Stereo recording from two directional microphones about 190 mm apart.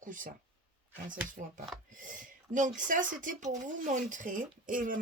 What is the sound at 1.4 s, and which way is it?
Speech, 50° right (ahead or behind).